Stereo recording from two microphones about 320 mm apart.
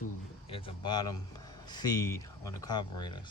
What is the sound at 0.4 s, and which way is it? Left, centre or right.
Speech, centre.